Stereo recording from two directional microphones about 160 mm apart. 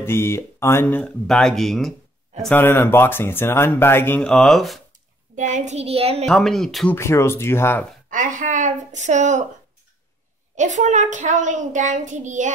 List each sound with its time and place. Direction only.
0.0 s speech: 15° left (ahead or behind)
2.4 s speech: 10° left (ahead or behind)
5.3 s a child's voice: 50° right (ahead or behind)
6.2 s speech: centre (ahead or behind)
7.0 s speech: 15° left (ahead or behind)
8.1 s a child's voice: 55° right (ahead or behind)
10.5 s a child's voice: 50° right (ahead or behind)